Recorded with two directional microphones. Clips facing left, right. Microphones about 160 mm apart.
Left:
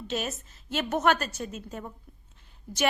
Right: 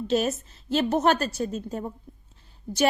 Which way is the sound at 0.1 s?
35° right (ahead or behind).